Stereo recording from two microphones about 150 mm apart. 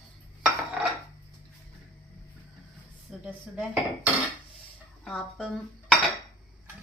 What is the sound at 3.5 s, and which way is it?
Dishes, 5° right (ahead or behind).